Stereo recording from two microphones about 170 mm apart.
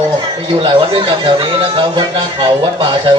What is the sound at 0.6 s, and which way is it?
Speech, 30° right (ahead or behind).